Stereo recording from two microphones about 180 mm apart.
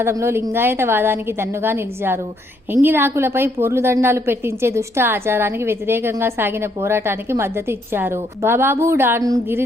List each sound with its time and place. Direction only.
0.0 s a woman's voice: 15° right (ahead or behind)